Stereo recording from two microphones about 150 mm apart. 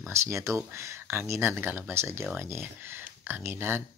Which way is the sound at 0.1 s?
20° right (ahead or behind).